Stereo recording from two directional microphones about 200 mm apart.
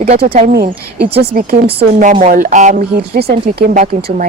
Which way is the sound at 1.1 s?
50° right (ahead or behind).